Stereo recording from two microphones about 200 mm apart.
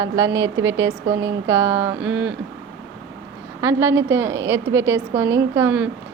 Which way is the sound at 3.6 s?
15° right (ahead or behind).